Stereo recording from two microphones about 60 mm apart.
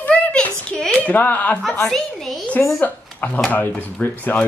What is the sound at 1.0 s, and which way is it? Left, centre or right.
Speech, left.